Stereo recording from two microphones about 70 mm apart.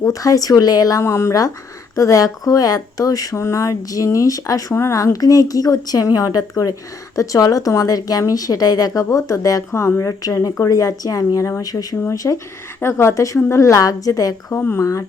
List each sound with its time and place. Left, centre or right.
0.0 s a woman's voice: left
1.0 s speech: left
2.0 s a woman's voice: left
3.3 s a woman's voice: left
4.7 s speech: left
5.1 s a woman's voice: left
8.9 s a woman's voice: left
12.1 s a woman's voice: left
12.8 s a woman's voice: left